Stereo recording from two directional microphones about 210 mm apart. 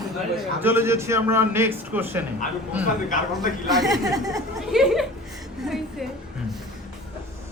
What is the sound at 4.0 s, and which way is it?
Speech, 15° right (ahead or behind).